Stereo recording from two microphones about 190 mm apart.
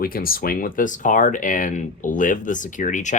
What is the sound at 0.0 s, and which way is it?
Speech, 50° left (ahead or behind).